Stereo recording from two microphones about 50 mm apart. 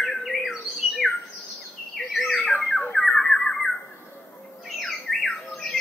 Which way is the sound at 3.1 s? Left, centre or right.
Centre.